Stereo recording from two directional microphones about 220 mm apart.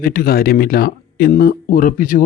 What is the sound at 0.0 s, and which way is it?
Speech, 40° left (ahead or behind).